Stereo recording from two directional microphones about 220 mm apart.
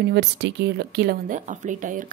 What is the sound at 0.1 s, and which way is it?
Speech, 50° right (ahead or behind).